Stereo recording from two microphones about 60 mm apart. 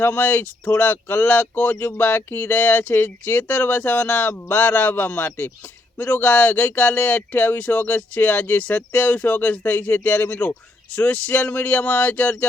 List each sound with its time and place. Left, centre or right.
0.0 s speech: left